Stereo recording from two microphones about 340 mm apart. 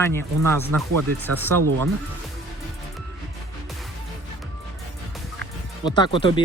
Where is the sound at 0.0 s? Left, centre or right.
Centre.